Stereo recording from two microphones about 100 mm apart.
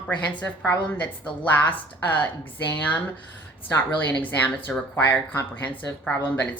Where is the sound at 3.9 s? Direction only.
15° left (ahead or behind).